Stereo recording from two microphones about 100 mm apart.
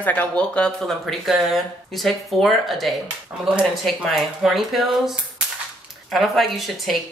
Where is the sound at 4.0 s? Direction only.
Centre (ahead or behind).